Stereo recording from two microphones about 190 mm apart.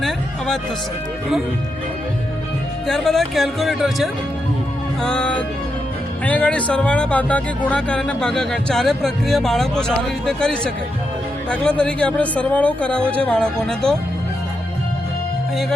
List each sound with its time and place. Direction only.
0.0 s speech: 5° left (ahead or behind)
2.8 s speech: centre (ahead or behind)